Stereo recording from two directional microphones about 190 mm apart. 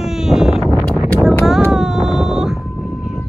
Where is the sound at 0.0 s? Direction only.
Centre (ahead or behind).